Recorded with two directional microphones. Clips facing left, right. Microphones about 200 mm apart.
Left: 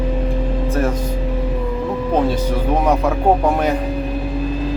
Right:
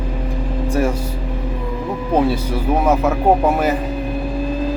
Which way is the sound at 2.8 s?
5° right (ahead or behind).